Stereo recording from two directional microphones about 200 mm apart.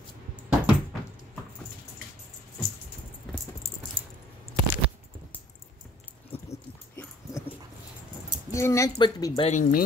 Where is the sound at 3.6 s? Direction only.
30° left (ahead or behind).